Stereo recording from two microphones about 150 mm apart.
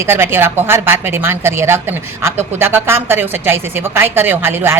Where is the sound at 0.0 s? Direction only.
15° right (ahead or behind).